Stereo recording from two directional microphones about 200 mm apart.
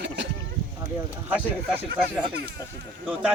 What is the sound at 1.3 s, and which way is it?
Speech, 5° right (ahead or behind).